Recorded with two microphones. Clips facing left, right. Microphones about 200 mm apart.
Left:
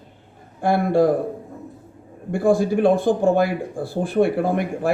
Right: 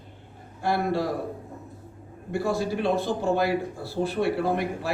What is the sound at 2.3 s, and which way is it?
Speech, 50° left (ahead or behind).